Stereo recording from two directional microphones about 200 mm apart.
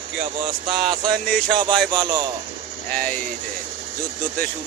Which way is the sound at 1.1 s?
50° right (ahead or behind).